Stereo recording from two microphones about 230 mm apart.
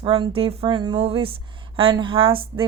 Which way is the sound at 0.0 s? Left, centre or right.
Right.